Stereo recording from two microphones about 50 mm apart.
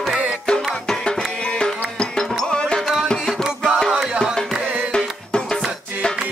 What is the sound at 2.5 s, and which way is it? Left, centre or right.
Music, centre.